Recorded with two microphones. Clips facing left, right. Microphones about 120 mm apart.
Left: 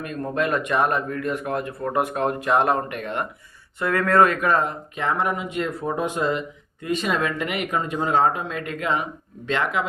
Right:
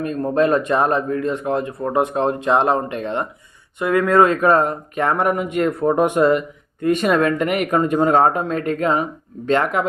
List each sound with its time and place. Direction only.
0.0 s speech: 30° right (ahead or behind)
4.4 s speech: 45° right (ahead or behind)